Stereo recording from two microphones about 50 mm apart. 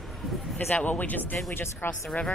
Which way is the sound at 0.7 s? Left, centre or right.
Left.